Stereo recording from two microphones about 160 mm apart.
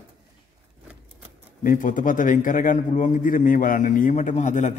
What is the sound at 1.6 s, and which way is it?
A man's voice, 55° left (ahead or behind).